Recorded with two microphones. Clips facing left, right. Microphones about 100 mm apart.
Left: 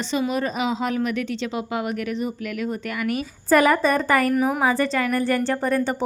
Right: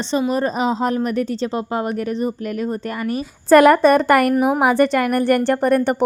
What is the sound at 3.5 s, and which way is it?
A woman's voice, 75° right (ahead or behind).